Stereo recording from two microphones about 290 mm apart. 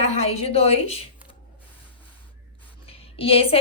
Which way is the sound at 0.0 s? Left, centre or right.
Left.